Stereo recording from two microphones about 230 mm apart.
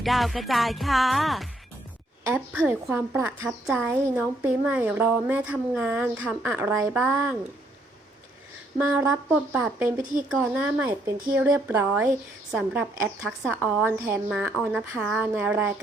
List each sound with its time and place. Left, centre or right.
0.0 s music: centre
2.3 s a woman's voice: centre
8.8 s a woman's voice: centre
10.2 s music: centre
11.3 s a woman's voice: centre
12.5 s music: centre
13.2 s a woman's voice: centre
14.7 s music: centre